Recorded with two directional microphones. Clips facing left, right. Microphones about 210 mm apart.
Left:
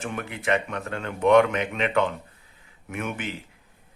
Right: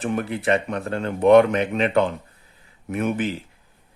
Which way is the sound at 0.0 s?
35° right (ahead or behind).